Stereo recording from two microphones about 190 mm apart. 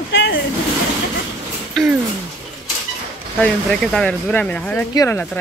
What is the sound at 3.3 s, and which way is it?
Speech, centre (ahead or behind).